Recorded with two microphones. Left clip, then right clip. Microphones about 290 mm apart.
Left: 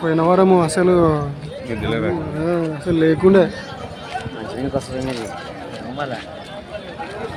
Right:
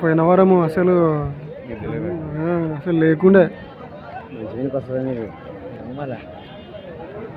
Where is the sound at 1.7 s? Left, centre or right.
Left.